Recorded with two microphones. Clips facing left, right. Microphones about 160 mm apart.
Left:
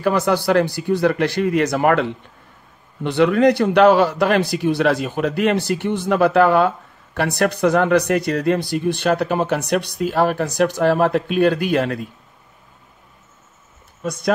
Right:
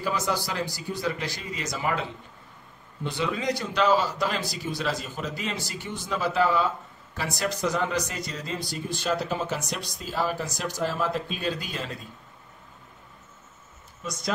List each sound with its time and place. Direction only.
0.0 s speech: 65° left (ahead or behind)
14.0 s speech: 55° left (ahead or behind)